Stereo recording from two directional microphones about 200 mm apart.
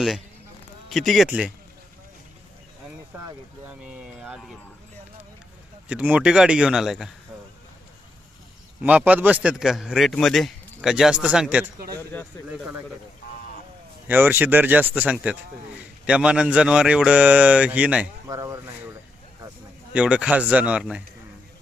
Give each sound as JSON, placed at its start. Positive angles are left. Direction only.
{"t": 0.9, "sound": "a man's voice", "side_deg": 0}
{"t": 3.2, "sound": "speech", "side_deg": -5}
{"t": 5.9, "sound": "a man's voice", "side_deg": -5}
{"t": 8.8, "sound": "a man's voice", "side_deg": -5}
{"t": 14.1, "sound": "a man's voice", "side_deg": -10}
{"t": 19.9, "sound": "speech", "side_deg": -5}